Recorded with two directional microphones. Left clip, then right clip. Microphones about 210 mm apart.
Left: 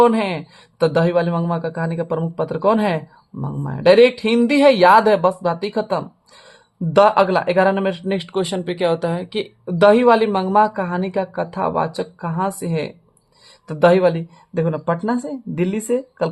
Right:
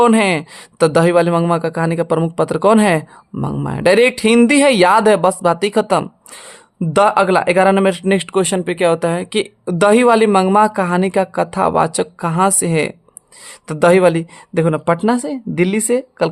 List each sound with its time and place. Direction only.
0.0 s speech: 35° right (ahead or behind)